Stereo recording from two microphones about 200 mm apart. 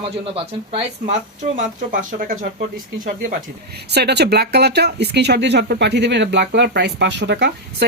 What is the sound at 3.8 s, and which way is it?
Speech, 55° right (ahead or behind).